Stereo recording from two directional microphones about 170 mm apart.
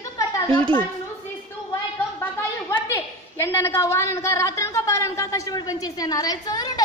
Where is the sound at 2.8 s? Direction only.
15° left (ahead or behind).